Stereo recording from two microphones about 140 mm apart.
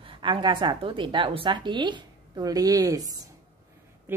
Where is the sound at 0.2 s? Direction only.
35° right (ahead or behind).